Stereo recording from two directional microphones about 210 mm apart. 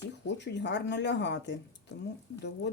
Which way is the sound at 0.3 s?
55° left (ahead or behind).